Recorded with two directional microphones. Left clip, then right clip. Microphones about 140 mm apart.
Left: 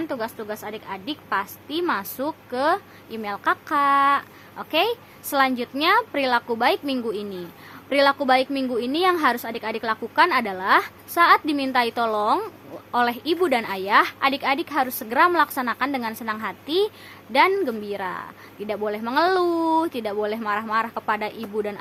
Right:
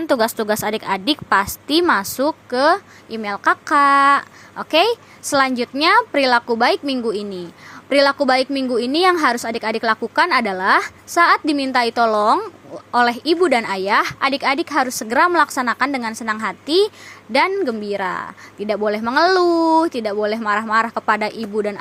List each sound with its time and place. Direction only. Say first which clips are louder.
0.1 s a woman's voice: right 12 dB; 55° right (ahead or behind)
1.9 s a woman's voice: right 8 dB; 40° right (ahead or behind)
17.5 s a woman's voice: right 3 dB; 20° right (ahead or behind)
17.8 s a woman's voice: right 7 dB; 35° right (ahead or behind)